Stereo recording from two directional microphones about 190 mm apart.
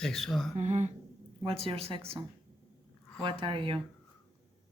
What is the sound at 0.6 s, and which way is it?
Speech, 35° right (ahead or behind).